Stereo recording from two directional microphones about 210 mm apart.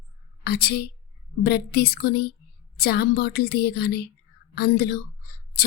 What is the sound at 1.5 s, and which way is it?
A woman's voice, 50° left (ahead or behind).